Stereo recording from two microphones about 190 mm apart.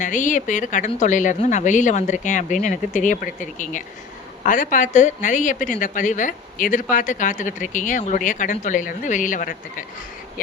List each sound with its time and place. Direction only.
0.0 s a woman's voice: 40° left (ahead or behind)